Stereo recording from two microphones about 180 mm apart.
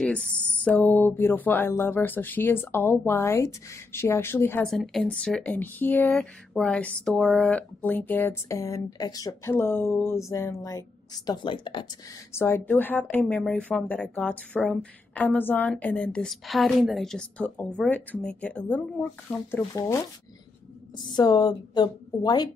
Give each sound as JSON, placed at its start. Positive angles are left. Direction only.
{"t": 0.0, "sound": "speech", "side_deg": 5}
{"t": 4.6, "sound": "a woman's voice", "side_deg": 0}
{"t": 12.3, "sound": "speech", "side_deg": 15}
{"t": 21.1, "sound": "a woman's voice", "side_deg": 20}